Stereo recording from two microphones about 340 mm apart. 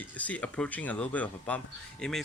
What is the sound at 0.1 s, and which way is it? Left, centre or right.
Speech, centre.